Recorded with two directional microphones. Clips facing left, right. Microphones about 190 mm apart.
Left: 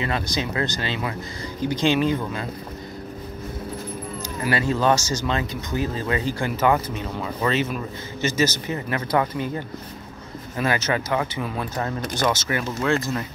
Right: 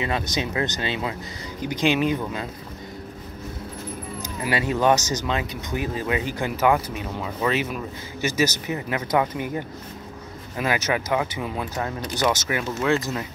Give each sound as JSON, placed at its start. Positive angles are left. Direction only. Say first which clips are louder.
{"t": 0.0, "sound": "speech", "louder": "even", "side_deg": -20}
{"t": 4.2, "sound": "speech", "louder": "left 1 dB", "side_deg": -15}